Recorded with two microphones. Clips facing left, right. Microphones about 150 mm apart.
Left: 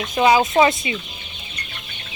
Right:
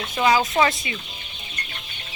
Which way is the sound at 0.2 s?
25° left (ahead or behind).